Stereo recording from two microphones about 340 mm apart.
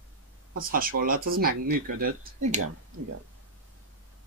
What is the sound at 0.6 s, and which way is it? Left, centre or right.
Speech, right.